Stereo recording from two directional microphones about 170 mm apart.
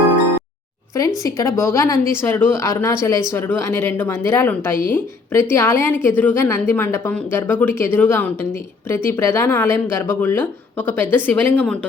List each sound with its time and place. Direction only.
1.2 s a woman's voice: 15° left (ahead or behind)